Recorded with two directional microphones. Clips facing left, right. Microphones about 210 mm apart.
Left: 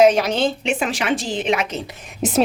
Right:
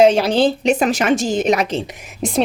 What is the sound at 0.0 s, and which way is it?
Speech, 30° right (ahead or behind).